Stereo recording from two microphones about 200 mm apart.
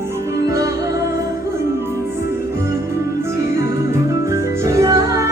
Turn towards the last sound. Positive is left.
turn(degrees=-15)  # may be behind; listen again after turning